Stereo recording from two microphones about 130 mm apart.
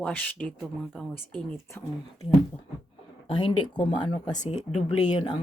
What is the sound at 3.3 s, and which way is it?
Speech, 35° left (ahead or behind).